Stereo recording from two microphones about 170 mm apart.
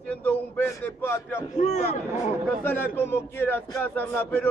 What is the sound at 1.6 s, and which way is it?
Speech, 45° left (ahead or behind).